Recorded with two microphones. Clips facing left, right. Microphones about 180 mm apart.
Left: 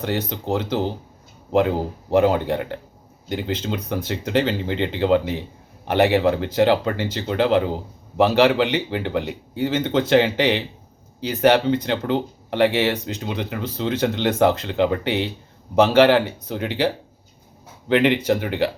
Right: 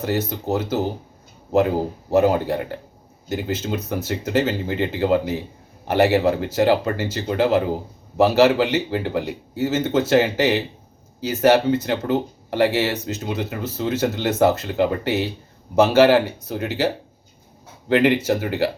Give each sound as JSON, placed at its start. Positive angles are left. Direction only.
{"t": 0.0, "sound": "speech", "side_deg": -5}
{"t": 18.0, "sound": "speech", "side_deg": -10}